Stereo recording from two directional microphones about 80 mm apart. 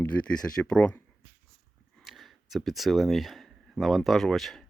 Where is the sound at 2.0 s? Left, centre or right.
Centre.